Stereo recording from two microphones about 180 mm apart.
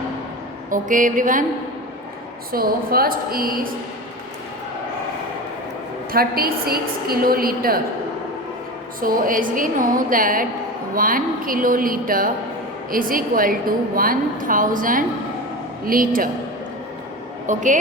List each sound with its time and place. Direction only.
0.7 s a woman's voice: 45° right (ahead or behind)
2.5 s a woman's voice: 55° right (ahead or behind)
6.1 s a woman's voice: 55° right (ahead or behind)
9.0 s a woman's voice: 50° right (ahead or behind)
17.4 s a woman's voice: 45° right (ahead or behind)